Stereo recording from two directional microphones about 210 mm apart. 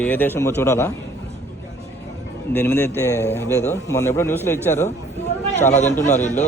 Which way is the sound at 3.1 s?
10° right (ahead or behind).